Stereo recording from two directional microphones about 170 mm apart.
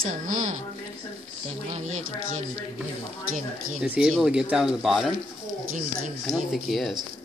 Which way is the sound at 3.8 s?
5° right (ahead or behind).